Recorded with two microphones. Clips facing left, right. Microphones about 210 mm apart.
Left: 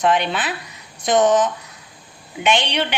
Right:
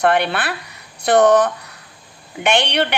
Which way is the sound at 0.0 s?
60° right (ahead or behind).